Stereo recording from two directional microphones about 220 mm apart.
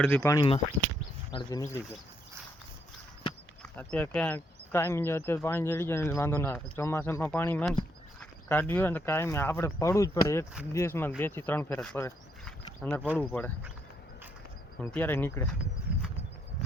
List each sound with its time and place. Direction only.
0.0 s speech: 10° left (ahead or behind)
3.6 s speech: 5° left (ahead or behind)
14.8 s speech: 10° left (ahead or behind)